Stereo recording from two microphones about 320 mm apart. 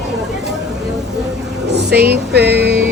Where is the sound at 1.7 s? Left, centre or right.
Right.